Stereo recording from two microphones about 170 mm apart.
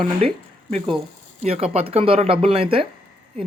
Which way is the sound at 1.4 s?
35° right (ahead or behind).